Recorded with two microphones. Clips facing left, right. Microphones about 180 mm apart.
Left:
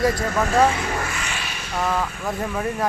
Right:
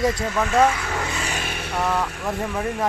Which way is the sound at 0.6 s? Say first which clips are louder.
Left 1 dB; 25° left (ahead or behind).